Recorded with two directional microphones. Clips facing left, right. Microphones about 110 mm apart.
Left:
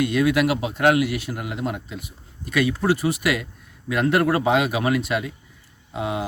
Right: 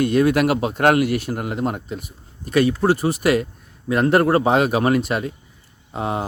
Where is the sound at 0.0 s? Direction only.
45° right (ahead or behind).